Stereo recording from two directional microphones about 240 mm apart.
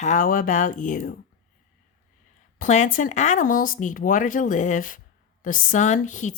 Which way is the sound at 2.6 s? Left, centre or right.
Left.